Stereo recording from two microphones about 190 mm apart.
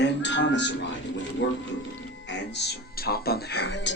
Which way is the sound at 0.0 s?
70° left (ahead or behind).